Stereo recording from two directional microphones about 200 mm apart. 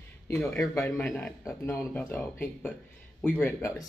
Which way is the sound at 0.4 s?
10° left (ahead or behind).